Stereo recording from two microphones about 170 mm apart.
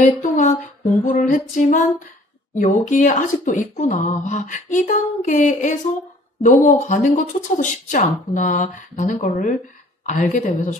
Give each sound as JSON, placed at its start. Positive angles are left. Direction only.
{"t": 0.0, "sound": "speech", "side_deg": 45}